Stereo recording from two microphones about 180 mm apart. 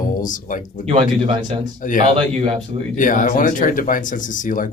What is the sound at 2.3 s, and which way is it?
Speech, 40° right (ahead or behind).